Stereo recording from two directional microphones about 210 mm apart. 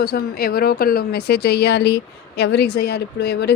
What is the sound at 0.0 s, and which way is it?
A woman's voice, 45° left (ahead or behind).